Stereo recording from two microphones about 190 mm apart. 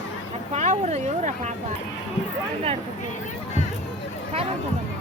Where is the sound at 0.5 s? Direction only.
35° right (ahead or behind).